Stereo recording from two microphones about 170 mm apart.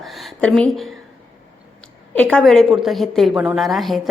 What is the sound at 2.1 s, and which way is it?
A woman's voice, 10° left (ahead or behind).